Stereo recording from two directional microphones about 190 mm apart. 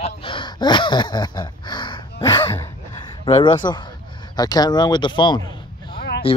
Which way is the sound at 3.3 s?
25° left (ahead or behind).